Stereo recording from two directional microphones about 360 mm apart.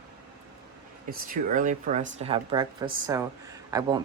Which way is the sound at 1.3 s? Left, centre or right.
Right.